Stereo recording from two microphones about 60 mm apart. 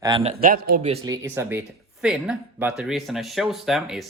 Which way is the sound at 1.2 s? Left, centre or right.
Right.